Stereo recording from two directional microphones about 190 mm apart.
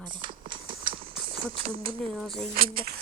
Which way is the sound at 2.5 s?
50° right (ahead or behind).